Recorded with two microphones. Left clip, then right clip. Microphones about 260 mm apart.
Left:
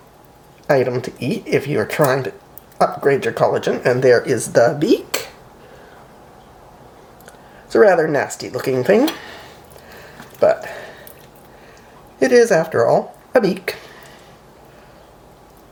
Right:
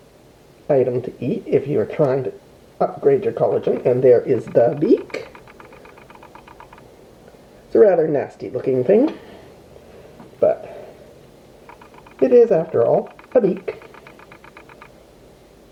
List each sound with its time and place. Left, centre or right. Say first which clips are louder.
0.7 s speech: left 1 dB; left
7.7 s speech: left 1 dB; left
10.4 s a sound: left 2 dB; left
12.2 s speech: even; left